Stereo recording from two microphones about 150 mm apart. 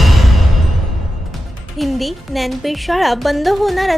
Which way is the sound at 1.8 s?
Centre (ahead or behind).